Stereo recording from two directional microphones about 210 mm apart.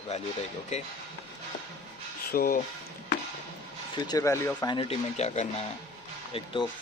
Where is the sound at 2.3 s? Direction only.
45° left (ahead or behind).